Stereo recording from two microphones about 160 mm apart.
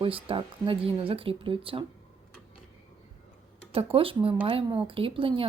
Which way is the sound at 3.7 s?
35° right (ahead or behind).